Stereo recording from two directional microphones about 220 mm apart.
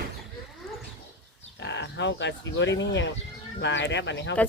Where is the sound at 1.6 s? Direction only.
55° left (ahead or behind).